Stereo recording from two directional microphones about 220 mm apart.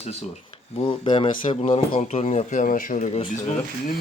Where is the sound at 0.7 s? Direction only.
20° left (ahead or behind).